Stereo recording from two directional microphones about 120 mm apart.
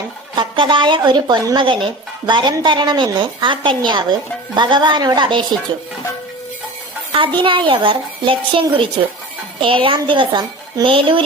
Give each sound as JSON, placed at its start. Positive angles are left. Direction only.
{"t": 0.3, "sound": "speech", "side_deg": -45}
{"t": 7.1, "sound": "a child's voice", "side_deg": -45}